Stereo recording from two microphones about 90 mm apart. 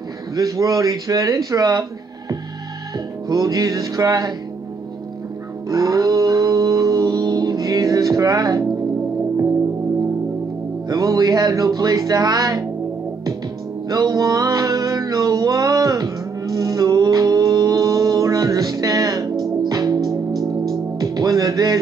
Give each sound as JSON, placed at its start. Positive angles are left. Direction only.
{"t": 0.4, "sound": "speech", "side_deg": -40}
{"t": 3.3, "sound": "music", "side_deg": -45}
{"t": 5.7, "sound": "a sound", "side_deg": -40}
{"t": 10.9, "sound": "speech", "side_deg": -40}
{"t": 13.8, "sound": "music", "side_deg": -40}